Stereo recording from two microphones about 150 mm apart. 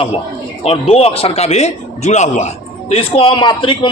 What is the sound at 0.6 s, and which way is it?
A man's voice, 45° left (ahead or behind).